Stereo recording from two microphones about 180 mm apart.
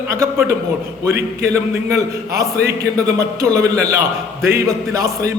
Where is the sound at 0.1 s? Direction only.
15° right (ahead or behind).